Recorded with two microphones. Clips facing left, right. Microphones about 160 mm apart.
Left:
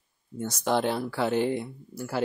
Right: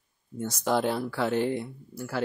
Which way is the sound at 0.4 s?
Centre (ahead or behind).